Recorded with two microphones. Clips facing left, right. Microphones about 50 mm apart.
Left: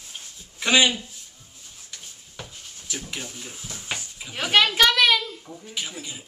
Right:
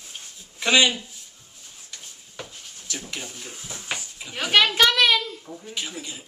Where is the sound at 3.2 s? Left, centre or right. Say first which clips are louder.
Even; centre.